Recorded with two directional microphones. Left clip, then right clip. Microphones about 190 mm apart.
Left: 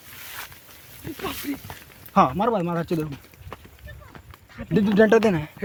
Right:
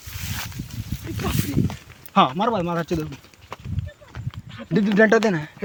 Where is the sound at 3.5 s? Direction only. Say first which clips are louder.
Right 3 dB; 55° right (ahead or behind).